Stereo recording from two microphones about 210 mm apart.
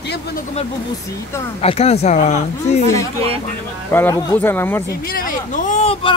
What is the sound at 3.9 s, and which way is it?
Speech, 10° left (ahead or behind).